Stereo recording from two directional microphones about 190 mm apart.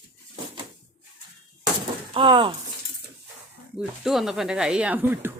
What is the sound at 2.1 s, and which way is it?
Speech, 25° right (ahead or behind).